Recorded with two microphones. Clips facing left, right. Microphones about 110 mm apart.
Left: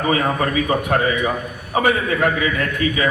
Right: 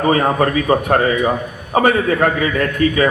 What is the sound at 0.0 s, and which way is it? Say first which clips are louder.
A man's voice: right 4 dB; 35° right (ahead or behind).